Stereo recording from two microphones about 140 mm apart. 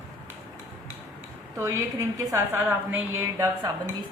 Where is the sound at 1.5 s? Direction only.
20° right (ahead or behind).